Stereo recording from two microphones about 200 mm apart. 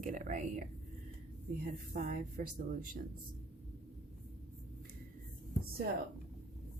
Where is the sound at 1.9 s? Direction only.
40° right (ahead or behind).